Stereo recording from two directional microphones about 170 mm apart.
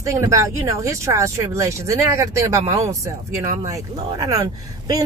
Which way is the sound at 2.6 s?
35° right (ahead or behind).